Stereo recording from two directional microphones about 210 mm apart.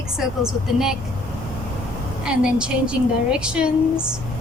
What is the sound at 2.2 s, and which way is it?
A woman's voice, 5° right (ahead or behind).